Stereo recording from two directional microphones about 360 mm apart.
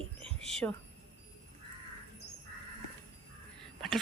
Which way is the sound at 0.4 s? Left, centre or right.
Centre.